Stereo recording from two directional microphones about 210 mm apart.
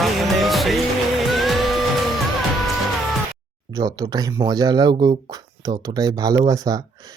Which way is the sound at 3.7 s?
15° right (ahead or behind).